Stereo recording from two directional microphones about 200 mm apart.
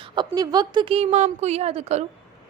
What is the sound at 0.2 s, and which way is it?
A woman's voice, 20° right (ahead or behind).